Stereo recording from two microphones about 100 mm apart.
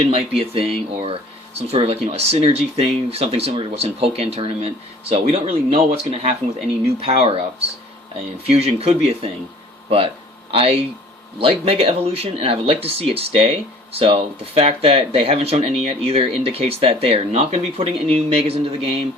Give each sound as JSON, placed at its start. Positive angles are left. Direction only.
{"t": 0.1, "sound": "speech", "side_deg": -75}
{"t": 1.5, "sound": "speech", "side_deg": -85}
{"t": 8.1, "sound": "speech", "side_deg": -85}
{"t": 10.5, "sound": "speech", "side_deg": -80}
{"t": 11.3, "sound": "speech", "side_deg": -70}